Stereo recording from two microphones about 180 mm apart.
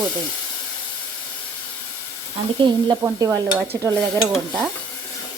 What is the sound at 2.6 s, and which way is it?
Stir, 25° right (ahead or behind).